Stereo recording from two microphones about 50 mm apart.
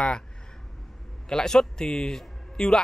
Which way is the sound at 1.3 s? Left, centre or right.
Centre.